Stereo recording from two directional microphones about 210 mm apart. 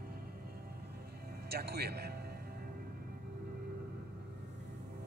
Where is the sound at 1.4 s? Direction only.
50° right (ahead or behind).